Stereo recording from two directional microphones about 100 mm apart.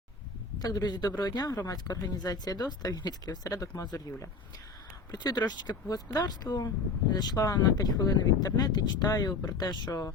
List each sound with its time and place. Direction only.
0.6 s speech: 40° left (ahead or behind)